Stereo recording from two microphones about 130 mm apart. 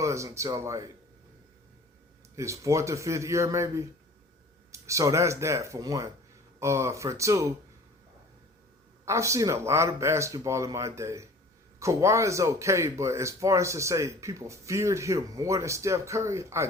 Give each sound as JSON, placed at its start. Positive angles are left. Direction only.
{"t": 0.0, "sound": "speech", "side_deg": -25}
{"t": 2.3, "sound": "speech", "side_deg": -25}
{"t": 9.0, "sound": "speech", "side_deg": -20}